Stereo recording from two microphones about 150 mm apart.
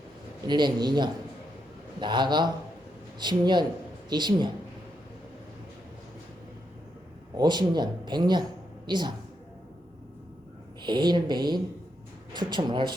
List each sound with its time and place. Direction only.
0.4 s a man's voice: 30° right (ahead or behind)
7.3 s a man's voice: 30° right (ahead or behind)
10.8 s a man's voice: 30° right (ahead or behind)